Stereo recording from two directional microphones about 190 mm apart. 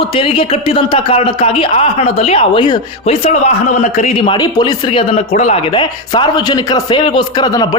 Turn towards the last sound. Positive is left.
turn(degrees=20)  # may be behind; listen again after turning